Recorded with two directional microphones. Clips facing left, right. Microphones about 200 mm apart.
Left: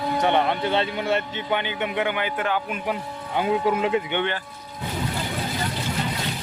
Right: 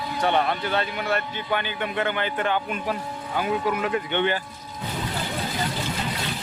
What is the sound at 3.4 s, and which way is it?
Speech, 25° left (ahead or behind).